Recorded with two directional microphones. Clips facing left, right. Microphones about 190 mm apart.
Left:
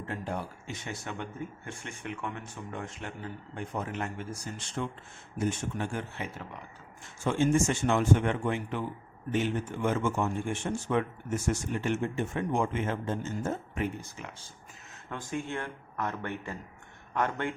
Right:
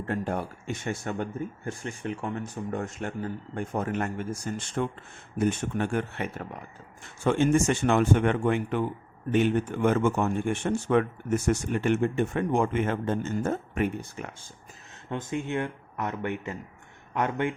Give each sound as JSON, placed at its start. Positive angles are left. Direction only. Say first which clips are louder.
{"t": 0.0, "sound": "speech", "louder": "right 6 dB", "side_deg": -50}
{"t": 5.4, "sound": "speech", "louder": "right 5 dB", "side_deg": -60}
{"t": 7.3, "sound": "speech", "louder": "right 3 dB", "side_deg": -65}
{"t": 15.1, "sound": "a man's voice", "louder": "right 5 dB", "side_deg": -20}